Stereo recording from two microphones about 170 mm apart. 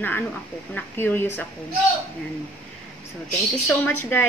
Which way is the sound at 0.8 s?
10° left (ahead or behind).